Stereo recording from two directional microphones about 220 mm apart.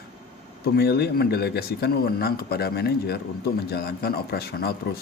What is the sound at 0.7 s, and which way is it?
Speech, 45° left (ahead or behind).